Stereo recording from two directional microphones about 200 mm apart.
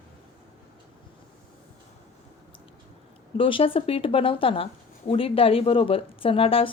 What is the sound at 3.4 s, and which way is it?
A woman's voice, 25° left (ahead or behind).